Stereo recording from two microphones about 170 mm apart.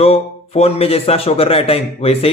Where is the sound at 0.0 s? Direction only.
35° left (ahead or behind).